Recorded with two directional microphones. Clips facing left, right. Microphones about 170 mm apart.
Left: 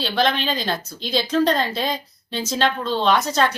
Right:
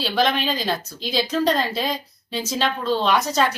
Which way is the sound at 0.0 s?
5° right (ahead or behind).